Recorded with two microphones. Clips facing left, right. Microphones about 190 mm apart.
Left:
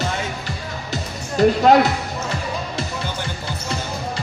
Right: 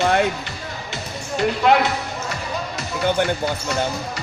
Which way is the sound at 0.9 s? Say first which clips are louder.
Left 3 dB; 40° left (ahead or behind).